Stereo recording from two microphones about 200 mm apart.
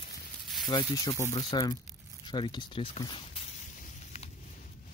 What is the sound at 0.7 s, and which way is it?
Speech, 20° left (ahead or behind).